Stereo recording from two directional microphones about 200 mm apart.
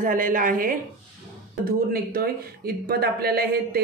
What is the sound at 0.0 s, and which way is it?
A woman's voice, 40° right (ahead or behind).